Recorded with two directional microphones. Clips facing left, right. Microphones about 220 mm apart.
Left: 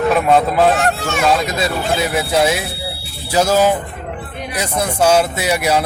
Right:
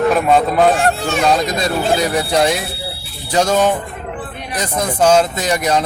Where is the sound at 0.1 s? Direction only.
Centre (ahead or behind).